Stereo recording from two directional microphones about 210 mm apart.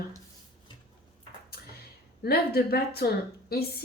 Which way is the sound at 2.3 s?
50° left (ahead or behind).